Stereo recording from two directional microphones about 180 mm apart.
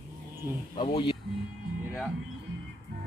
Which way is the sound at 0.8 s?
30° left (ahead or behind).